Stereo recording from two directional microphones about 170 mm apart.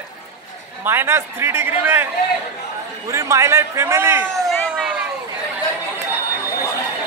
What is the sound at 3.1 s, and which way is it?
A man's voice, 15° right (ahead or behind).